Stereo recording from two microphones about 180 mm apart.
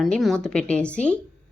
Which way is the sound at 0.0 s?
Centre (ahead or behind).